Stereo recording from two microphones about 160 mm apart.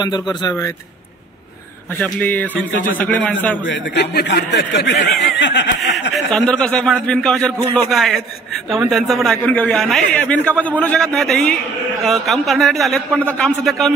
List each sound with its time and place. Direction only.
0.0 s speech: 25° left (ahead or behind)
2.0 s a man's voice: 10° left (ahead or behind)
3.9 s a man's voice: 90° left
6.1 s a man's voice: 5° left (ahead or behind)